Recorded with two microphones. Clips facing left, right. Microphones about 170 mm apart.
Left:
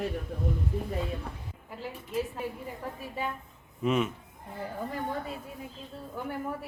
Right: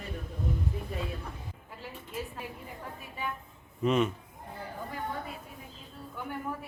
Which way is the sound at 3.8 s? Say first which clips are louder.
Right 1 dB; 5° left (ahead or behind).